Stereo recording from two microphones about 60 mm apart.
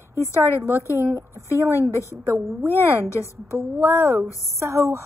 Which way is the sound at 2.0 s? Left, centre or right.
Right.